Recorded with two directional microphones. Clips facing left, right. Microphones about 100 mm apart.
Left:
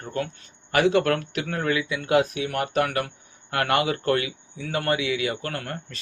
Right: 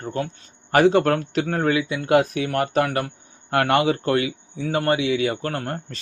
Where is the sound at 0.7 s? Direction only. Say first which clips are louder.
Right 4 dB; 40° right (ahead or behind).